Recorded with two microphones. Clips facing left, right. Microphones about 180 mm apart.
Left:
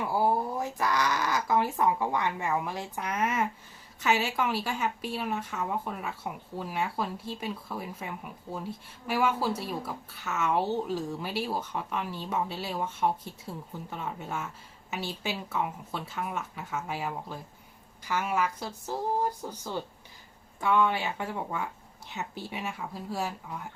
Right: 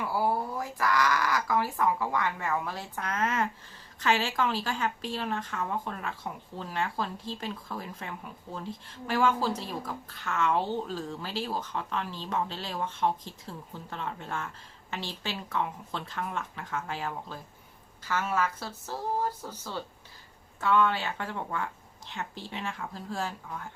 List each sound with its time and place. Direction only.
0.0 s speech: 20° left (ahead or behind)